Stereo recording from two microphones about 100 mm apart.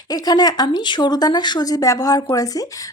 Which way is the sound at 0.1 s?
40° left (ahead or behind).